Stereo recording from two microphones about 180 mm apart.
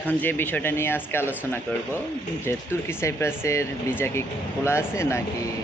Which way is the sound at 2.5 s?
15° left (ahead or behind).